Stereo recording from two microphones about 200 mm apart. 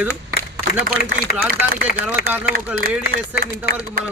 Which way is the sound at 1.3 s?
50° left (ahead or behind).